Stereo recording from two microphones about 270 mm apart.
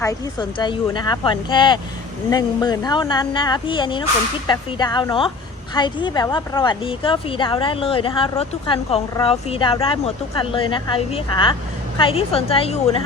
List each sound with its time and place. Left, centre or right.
0.0 s a woman's voice: centre